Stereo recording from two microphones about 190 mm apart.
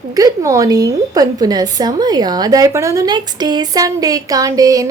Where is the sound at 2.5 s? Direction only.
20° right (ahead or behind).